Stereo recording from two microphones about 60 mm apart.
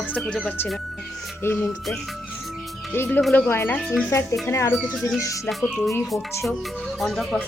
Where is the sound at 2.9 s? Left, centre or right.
Left.